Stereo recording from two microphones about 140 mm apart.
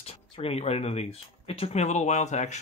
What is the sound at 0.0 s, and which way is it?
Speech, 45° left (ahead or behind).